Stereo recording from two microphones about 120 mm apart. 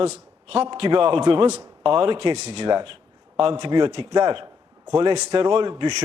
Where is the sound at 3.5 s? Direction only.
40° right (ahead or behind).